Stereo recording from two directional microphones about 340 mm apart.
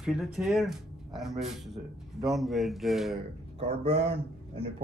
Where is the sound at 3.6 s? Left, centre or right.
Centre.